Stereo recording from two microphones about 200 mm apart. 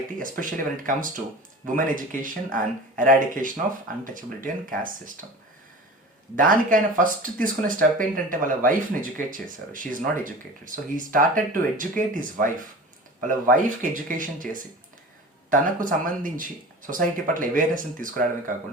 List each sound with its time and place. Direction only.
0.2 s speech: 40° right (ahead or behind)
6.3 s speech: 40° right (ahead or behind)